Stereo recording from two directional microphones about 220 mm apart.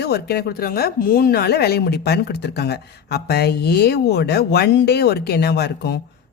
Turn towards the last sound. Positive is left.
turn(degrees=50)  # may be behind; listen again after turning